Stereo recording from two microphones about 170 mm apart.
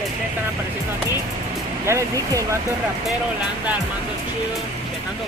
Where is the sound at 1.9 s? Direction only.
20° right (ahead or behind).